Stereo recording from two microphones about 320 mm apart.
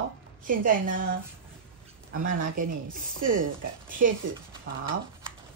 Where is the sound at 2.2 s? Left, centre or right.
Right.